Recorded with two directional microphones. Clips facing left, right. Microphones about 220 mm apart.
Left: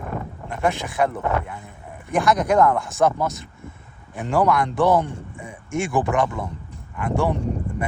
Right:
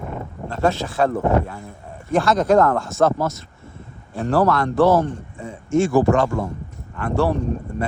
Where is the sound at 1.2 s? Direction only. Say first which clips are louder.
Right 5 dB; 30° right (ahead or behind).